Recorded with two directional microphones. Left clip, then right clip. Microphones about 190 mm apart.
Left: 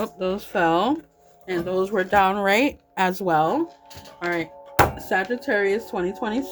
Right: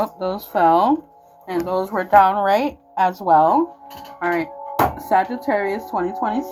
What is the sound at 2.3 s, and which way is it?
Speech, 65° left (ahead or behind).